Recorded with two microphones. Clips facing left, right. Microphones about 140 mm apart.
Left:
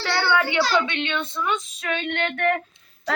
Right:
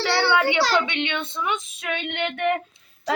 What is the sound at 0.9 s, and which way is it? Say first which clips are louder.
Female singing: even; 15° right (ahead or behind).